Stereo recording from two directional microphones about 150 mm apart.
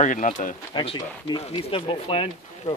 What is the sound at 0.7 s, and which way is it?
Speech, 30° left (ahead or behind).